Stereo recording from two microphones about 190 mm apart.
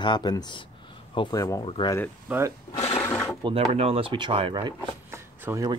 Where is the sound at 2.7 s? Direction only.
30° left (ahead or behind).